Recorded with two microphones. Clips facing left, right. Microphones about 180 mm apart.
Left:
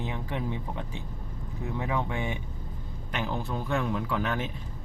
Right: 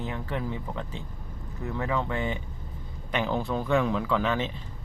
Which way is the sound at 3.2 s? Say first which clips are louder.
Right 4 dB; 90° right.